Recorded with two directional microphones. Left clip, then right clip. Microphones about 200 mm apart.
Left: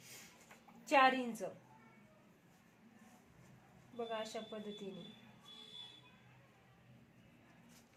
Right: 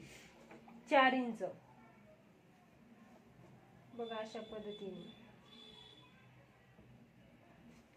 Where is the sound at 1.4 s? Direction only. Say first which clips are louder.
Right 3 dB; 10° right (ahead or behind).